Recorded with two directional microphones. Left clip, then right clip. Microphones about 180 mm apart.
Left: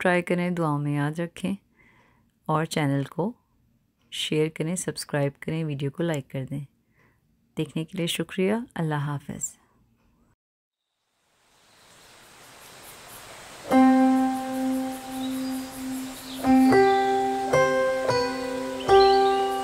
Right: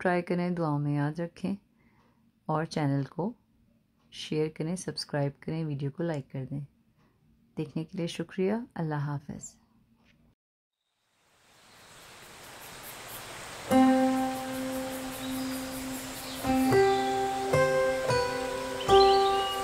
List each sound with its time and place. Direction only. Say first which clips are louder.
0.0 s speech: left 5 dB; 20° left (ahead or behind)
13.7 s music: left 4 dB; centre (ahead or behind)
16.4 s music: left 6 dB; centre (ahead or behind)